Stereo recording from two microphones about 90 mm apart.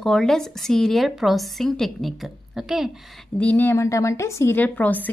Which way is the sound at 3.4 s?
20° left (ahead or behind).